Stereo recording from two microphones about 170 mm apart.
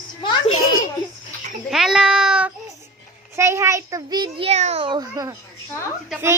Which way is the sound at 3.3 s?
15° right (ahead or behind).